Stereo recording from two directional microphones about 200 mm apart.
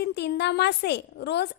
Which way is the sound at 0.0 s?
55° left (ahead or behind).